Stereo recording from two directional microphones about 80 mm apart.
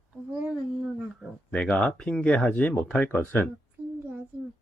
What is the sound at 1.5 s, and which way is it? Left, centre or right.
Speech, centre.